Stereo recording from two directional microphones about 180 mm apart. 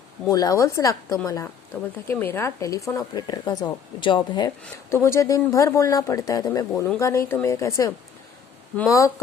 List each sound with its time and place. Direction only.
0.3 s speech: 20° left (ahead or behind)
4.6 s speech: 15° left (ahead or behind)